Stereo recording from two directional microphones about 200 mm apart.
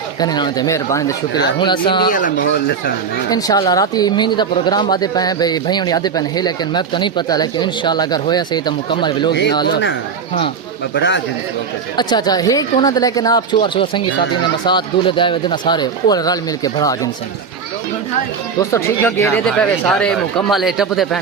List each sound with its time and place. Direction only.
0.2 s speech: 20° left (ahead or behind)
2.0 s speech: 40° left (ahead or behind)
3.2 s speech: 20° left (ahead or behind)
10.9 s a man's voice: 60° left (ahead or behind)
11.9 s speech: 20° left (ahead or behind)
18.7 s speech: 10° left (ahead or behind)